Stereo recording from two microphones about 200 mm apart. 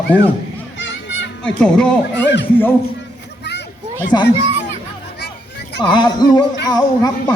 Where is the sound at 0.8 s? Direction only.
65° left (ahead or behind).